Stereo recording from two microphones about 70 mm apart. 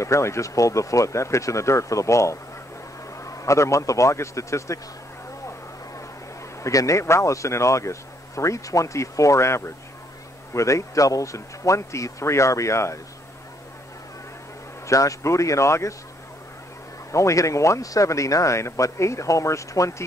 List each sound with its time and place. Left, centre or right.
0.0 s speech: left
6.6 s speech: left
14.9 s speech: left
17.1 s speech: left